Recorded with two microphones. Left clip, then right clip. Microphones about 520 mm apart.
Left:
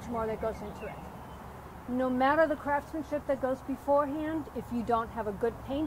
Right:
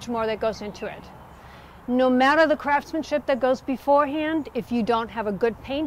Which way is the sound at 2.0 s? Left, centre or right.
Right.